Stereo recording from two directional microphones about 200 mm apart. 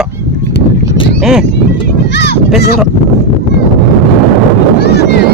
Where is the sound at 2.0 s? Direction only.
60° left (ahead or behind).